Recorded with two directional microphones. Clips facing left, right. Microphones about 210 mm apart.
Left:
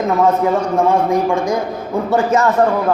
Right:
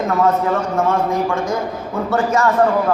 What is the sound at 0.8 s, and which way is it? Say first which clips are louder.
A man's voice: left 3 dB; 15° left (ahead or behind).